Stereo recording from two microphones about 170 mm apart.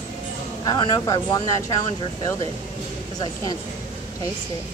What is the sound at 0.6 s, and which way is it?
Speech, 20° left (ahead or behind).